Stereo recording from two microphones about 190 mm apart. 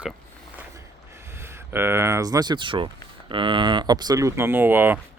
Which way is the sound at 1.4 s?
15° right (ahead or behind).